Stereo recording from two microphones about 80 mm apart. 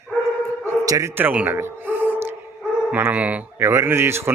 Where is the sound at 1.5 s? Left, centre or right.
Right.